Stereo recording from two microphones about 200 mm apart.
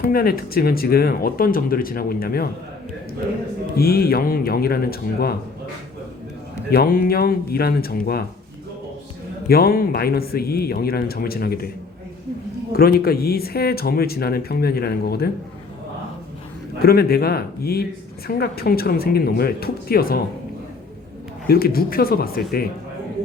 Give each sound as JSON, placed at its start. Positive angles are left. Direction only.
{"t": 0.0, "sound": "speech", "side_deg": 50}
{"t": 3.8, "sound": "speech", "side_deg": 50}
{"t": 6.7, "sound": "speech", "side_deg": 50}
{"t": 9.5, "sound": "speech", "side_deg": 50}
{"t": 12.7, "sound": "speech", "side_deg": 50}
{"t": 16.8, "sound": "speech", "side_deg": 50}
{"t": 21.4, "sound": "speech", "side_deg": 50}